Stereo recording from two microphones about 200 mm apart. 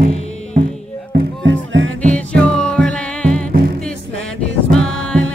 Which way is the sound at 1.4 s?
70° right (ahead or behind).